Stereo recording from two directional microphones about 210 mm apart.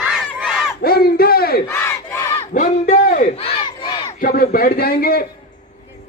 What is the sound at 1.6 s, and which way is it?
Battle cry, 15° left (ahead or behind).